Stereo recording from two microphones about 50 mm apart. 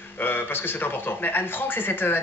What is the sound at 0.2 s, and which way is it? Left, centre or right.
Speech, left.